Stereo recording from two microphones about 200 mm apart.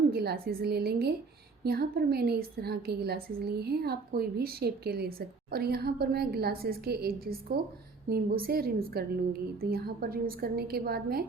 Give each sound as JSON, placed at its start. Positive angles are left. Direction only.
{"t": 0.1, "sound": "a woman's voice", "side_deg": -50}